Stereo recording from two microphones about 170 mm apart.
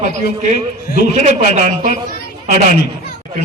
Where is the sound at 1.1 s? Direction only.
45° right (ahead or behind).